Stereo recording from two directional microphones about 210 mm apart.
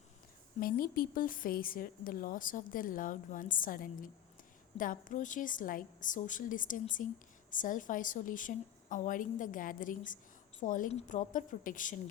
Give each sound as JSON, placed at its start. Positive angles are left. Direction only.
{"t": 0.6, "sound": "a woman's voice", "side_deg": 45}